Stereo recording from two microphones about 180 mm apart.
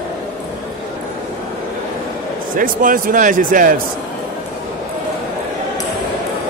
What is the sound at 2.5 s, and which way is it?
A man's voice, 50° right (ahead or behind).